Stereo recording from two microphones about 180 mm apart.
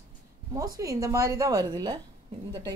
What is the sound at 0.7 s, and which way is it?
A woman's voice, 20° right (ahead or behind).